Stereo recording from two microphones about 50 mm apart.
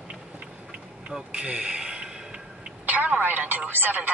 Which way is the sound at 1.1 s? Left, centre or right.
Centre.